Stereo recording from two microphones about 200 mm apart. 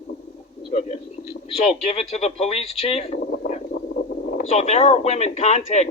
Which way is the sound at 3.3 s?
50° left (ahead or behind).